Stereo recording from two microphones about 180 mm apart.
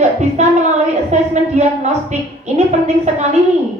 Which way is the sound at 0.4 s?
40° right (ahead or behind).